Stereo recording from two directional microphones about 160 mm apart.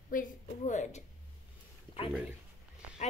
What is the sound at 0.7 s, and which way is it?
Speech, 45° left (ahead or behind).